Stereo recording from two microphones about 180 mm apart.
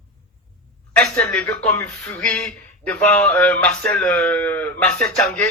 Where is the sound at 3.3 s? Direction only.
5° left (ahead or behind).